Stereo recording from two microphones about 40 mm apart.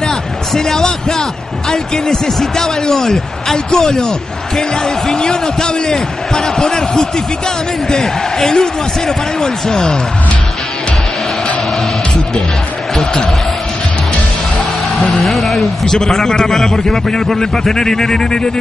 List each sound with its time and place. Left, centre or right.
0.6 s speech: centre
8.4 s speech: centre
12.9 s a sound: centre
15.0 s speech: centre
16.0 s speech: centre